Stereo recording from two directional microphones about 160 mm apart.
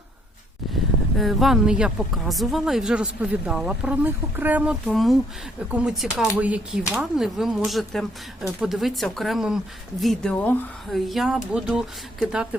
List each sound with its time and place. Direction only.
1.2 s speech: centre (ahead or behind)